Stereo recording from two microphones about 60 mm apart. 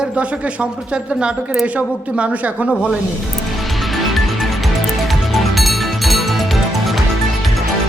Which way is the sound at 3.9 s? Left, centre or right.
Centre.